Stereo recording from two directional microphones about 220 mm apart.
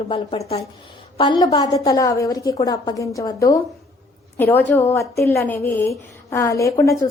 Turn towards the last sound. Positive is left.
turn(degrees=15)  # may be behind; listen again after turning